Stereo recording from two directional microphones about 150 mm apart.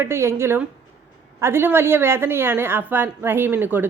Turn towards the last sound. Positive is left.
turn(degrees=-15)  # may be behind; listen again after turning